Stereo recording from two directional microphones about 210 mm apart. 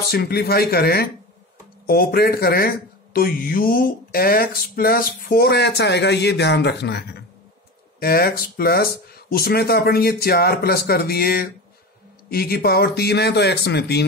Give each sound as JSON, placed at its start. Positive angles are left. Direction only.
{"t": 0.1, "sound": "speech", "side_deg": 50}